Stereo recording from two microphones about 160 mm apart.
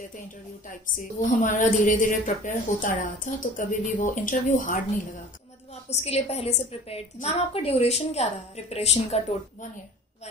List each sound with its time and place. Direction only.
0.7 s a woman's voice: 55° left (ahead or behind)
5.9 s a woman's voice: 40° left (ahead or behind)